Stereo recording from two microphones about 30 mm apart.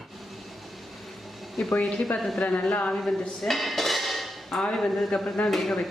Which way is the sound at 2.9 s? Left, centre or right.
Centre.